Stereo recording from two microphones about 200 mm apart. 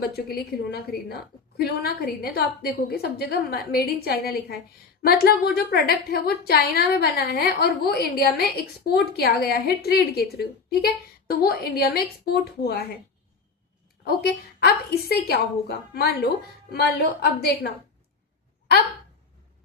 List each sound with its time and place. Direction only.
0.3 s a woman's voice: 50° left (ahead or behind)
14.0 s a woman's voice: 55° left (ahead or behind)